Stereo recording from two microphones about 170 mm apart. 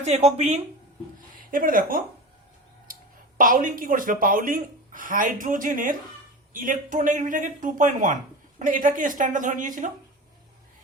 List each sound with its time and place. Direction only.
0.0 s speech: 40° right (ahead or behind)
1.5 s speech: 55° right (ahead or behind)